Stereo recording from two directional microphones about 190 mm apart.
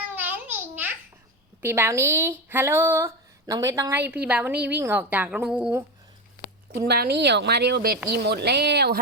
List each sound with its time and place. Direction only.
0.1 s babbling: 10° right (ahead or behind)
1.6 s speech: 15° right (ahead or behind)
4.5 s a woman's voice: 60° right (ahead or behind)
4.8 s speech: 10° right (ahead or behind)
6.7 s a woman's voice: 55° right (ahead or behind)